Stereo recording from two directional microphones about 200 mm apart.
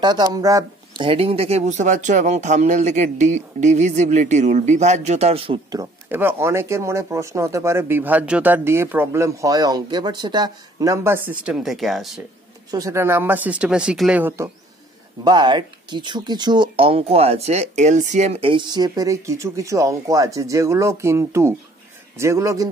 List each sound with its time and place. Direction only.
0.0 s speech: 20° right (ahead or behind)
5.8 s speech: 10° right (ahead or behind)
12.7 s speech: 15° right (ahead or behind)